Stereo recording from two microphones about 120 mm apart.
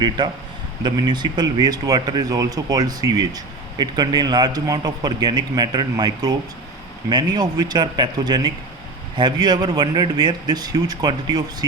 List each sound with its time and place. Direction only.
0.2 s speech: 40° right (ahead or behind)